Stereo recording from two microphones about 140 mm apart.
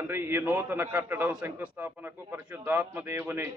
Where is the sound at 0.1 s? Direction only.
15° right (ahead or behind).